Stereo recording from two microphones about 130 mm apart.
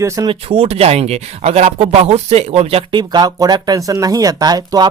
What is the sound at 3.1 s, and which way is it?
Speech, 30° right (ahead or behind).